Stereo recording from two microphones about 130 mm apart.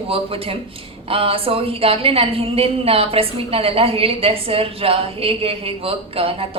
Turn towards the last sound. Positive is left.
turn(degrees=-45)  # may be behind; listen again after turning